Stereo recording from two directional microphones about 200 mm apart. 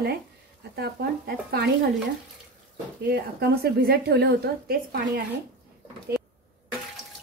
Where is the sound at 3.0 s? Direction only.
55° right (ahead or behind).